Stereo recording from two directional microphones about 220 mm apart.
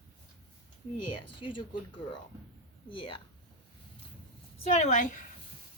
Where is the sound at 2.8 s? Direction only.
25° left (ahead or behind).